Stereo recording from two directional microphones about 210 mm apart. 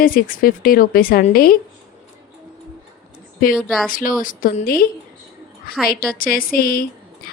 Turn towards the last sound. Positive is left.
turn(degrees=45)  # may be behind; listen again after turning